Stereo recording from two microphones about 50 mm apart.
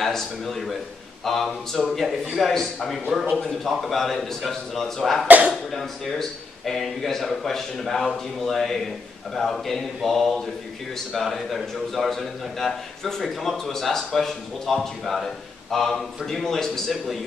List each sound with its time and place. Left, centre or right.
0.0 s a man's voice: centre
3.3 s a man's voice: centre